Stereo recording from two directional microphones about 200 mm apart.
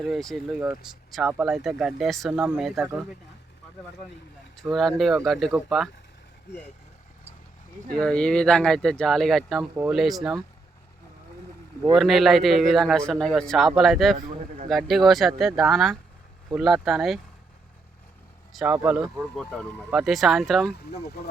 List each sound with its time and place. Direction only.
0.0 s speech: centre (ahead or behind)
4.5 s speech: centre (ahead or behind)
7.9 s speech: 5° left (ahead or behind)
11.9 s speech: centre (ahead or behind)
18.5 s speech: 5° right (ahead or behind)
19.2 s speech: 5° left (ahead or behind)
20.7 s speech: 55° left (ahead or behind)